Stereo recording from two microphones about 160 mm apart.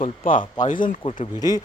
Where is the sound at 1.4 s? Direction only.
25° left (ahead or behind).